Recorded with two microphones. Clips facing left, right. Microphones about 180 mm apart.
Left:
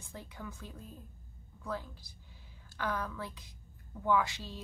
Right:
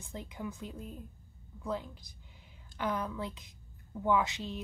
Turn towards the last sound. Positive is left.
turn(degrees=-20)  # may be behind; listen again after turning